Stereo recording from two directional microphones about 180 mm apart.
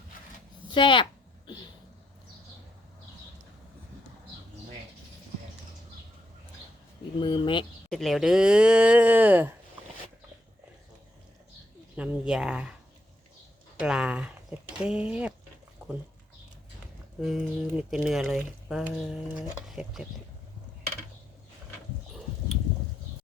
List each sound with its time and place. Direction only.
0.7 s speech: 25° left (ahead or behind)
7.2 s speech: 25° left (ahead or behind)
7.9 s speech: centre (ahead or behind)
11.9 s speech: 5° right (ahead or behind)
13.7 s speech: 5° right (ahead or behind)
17.2 s speech: 5° right (ahead or behind)